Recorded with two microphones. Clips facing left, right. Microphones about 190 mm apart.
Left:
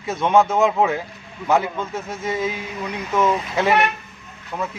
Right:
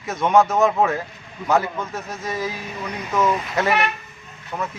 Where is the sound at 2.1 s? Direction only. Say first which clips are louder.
Left 5 dB; 25° left (ahead or behind).